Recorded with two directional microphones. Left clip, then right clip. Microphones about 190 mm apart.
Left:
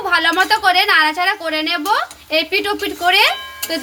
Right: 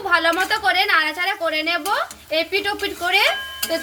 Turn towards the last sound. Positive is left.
turn(degrees=55)  # may be behind; listen again after turning